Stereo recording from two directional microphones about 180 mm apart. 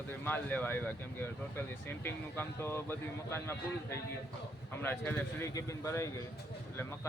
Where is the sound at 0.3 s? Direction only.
10° left (ahead or behind).